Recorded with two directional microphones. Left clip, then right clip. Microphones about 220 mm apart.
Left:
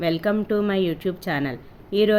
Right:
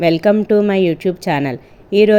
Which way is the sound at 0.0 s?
25° right (ahead or behind).